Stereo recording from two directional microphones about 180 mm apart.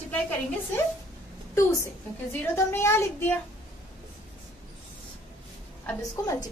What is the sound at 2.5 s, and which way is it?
Speech, 15° left (ahead or behind).